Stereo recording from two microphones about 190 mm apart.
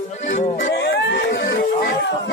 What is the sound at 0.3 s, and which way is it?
Music, 70° left (ahead or behind).